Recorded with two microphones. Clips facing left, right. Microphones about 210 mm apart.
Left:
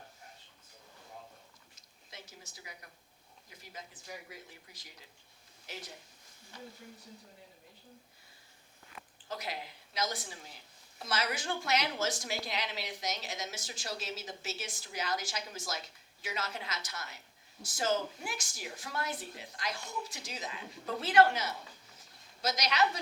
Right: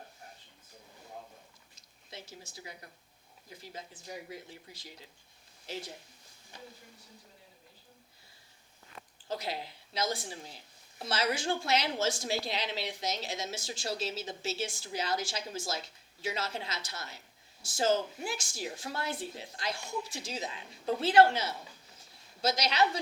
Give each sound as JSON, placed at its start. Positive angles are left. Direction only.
{"t": 2.0, "sound": "a woman's voice", "side_deg": -30}
{"t": 5.7, "sound": "a woman's voice", "side_deg": -30}
{"t": 9.3, "sound": "a woman's voice", "side_deg": -30}